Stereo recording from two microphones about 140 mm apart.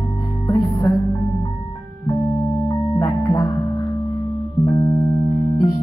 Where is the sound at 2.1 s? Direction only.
25° left (ahead or behind).